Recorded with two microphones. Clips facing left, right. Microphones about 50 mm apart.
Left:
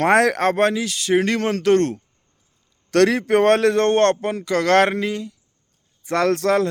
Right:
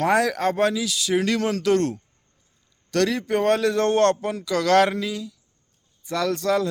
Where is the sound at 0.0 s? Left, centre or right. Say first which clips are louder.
Left 4 dB; left.